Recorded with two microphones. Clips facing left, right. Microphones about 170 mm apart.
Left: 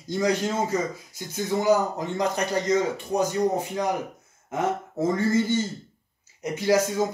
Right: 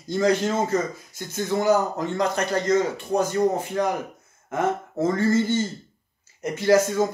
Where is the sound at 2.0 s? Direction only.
15° left (ahead or behind).